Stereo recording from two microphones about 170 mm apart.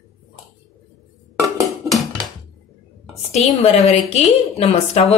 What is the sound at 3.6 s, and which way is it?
A woman's voice, 35° left (ahead or behind).